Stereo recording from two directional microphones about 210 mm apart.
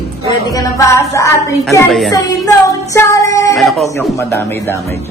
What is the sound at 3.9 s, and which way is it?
Music, 15° left (ahead or behind).